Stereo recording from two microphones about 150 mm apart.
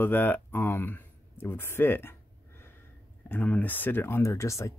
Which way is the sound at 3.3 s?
10° left (ahead or behind).